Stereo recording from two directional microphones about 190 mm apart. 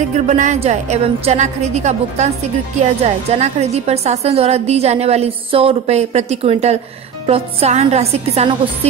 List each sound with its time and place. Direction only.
0.1 s a woman's voice: 40° right (ahead or behind)